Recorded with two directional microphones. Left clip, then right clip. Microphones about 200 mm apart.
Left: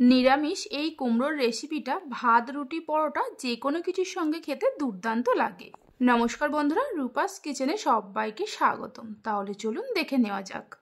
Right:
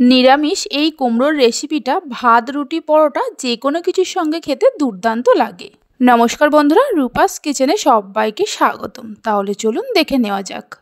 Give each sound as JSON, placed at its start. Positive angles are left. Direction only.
{"t": 0.1, "sound": "speech", "side_deg": -40}